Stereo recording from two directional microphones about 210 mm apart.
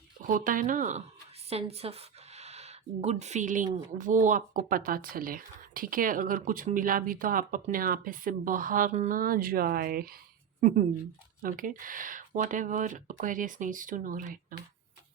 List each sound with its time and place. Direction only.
0.3 s speech: 40° right (ahead or behind)